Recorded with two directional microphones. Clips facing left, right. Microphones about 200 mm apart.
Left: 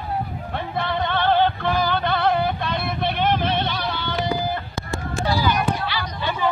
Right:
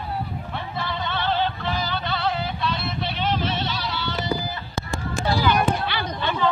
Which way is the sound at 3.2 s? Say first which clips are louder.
Left 3 dB; 60° left (ahead or behind).